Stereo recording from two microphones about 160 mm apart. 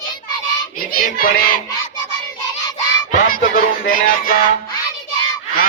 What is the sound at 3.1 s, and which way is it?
Speech, 60° left (ahead or behind).